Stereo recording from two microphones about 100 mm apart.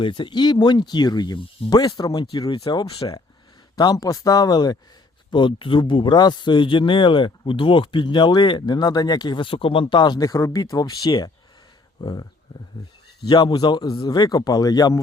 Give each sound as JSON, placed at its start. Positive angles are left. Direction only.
{"t": 0.0, "sound": "speech", "side_deg": 55}
{"t": 3.8, "sound": "a man's voice", "side_deg": 40}
{"t": 5.3, "sound": "speech", "side_deg": 55}
{"t": 9.9, "sound": "a man's voice", "side_deg": 45}
{"t": 13.2, "sound": "a man's voice", "side_deg": 45}